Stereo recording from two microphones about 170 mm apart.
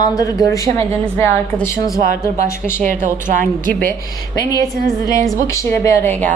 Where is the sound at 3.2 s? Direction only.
50° right (ahead or behind).